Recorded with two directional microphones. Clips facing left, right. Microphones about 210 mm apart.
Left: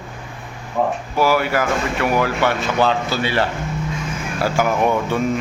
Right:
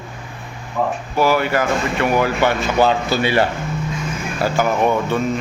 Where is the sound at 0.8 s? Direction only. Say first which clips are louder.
Left 1 dB; 20° left (ahead or behind).